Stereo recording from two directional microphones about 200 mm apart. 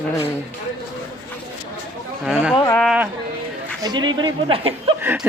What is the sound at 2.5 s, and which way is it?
Speech, 15° left (ahead or behind).